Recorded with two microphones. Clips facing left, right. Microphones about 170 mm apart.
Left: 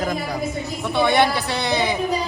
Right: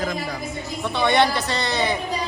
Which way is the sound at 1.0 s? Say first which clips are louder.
Left 1 dB; 10° left (ahead or behind).